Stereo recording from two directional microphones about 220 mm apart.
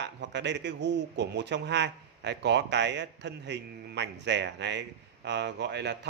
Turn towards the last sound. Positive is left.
turn(degrees=-50)  # may be behind; listen again after turning